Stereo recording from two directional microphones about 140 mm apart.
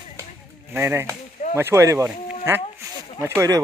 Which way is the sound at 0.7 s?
15° right (ahead or behind).